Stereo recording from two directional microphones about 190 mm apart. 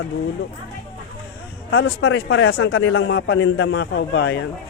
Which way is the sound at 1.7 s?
90° left.